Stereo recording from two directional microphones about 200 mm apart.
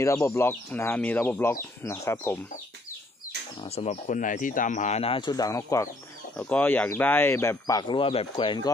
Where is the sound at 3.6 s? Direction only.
30° left (ahead or behind).